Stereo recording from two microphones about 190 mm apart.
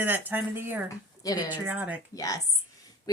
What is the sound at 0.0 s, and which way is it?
Speech, 10° right (ahead or behind).